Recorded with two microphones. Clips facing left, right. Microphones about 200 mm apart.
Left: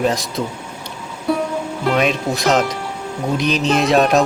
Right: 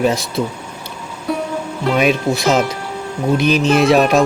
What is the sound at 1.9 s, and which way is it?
Speech, 5° right (ahead or behind).